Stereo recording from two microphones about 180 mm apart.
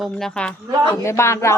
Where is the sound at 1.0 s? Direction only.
15° left (ahead or behind).